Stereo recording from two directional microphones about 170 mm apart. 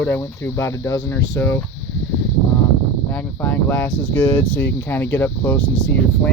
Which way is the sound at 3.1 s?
10° left (ahead or behind).